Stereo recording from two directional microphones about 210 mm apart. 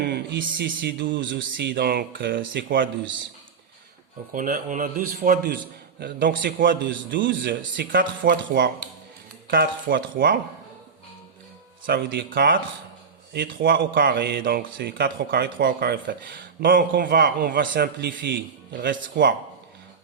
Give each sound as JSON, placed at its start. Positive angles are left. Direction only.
{"t": 0.1, "sound": "speech", "side_deg": -55}
{"t": 4.3, "sound": "a man's voice", "side_deg": -40}
{"t": 6.7, "sound": "speech", "side_deg": -60}
{"t": 11.9, "sound": "speech", "side_deg": -50}